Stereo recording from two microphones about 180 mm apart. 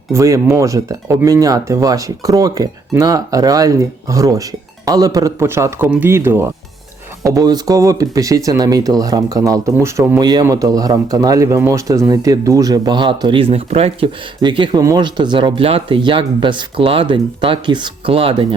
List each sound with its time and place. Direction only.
0.1 s speech: 15° right (ahead or behind)